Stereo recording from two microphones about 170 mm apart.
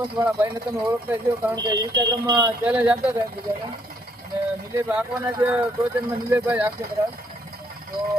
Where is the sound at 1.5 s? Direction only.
20° right (ahead or behind).